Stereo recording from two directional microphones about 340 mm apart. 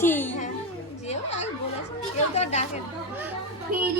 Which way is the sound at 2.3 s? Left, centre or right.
Centre.